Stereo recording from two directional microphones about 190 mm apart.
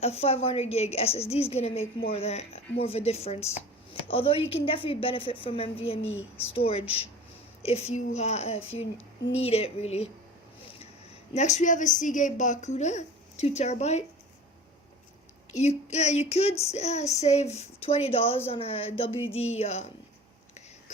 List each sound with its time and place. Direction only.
0.0 s a woman's voice: 30° left (ahead or behind)
11.3 s a woman's voice: 40° left (ahead or behind)
15.5 s a woman's voice: 35° left (ahead or behind)